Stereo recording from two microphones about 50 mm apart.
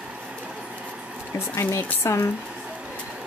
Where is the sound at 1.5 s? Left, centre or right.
Left.